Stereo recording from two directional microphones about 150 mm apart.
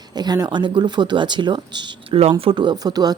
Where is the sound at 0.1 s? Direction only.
25° right (ahead or behind).